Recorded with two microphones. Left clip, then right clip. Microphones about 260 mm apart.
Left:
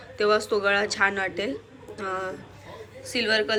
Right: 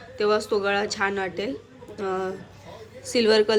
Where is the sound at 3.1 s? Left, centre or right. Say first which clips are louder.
Right 5 dB; right.